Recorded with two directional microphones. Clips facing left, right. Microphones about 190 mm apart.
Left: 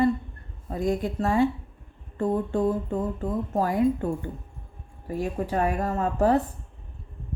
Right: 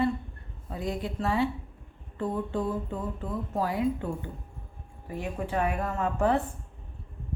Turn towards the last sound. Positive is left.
turn(degrees=35)  # may be behind; listen again after turning